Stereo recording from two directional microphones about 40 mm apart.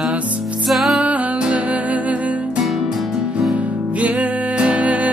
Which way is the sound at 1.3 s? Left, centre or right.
Right.